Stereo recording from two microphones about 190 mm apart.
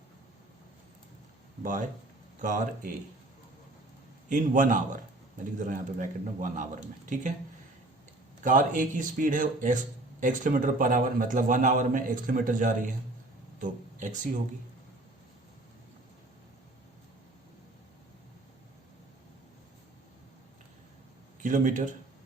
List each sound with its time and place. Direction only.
1.6 s speech: 45° right (ahead or behind)
4.3 s speech: 45° right (ahead or behind)
8.4 s speech: 45° right (ahead or behind)
21.4 s speech: 40° right (ahead or behind)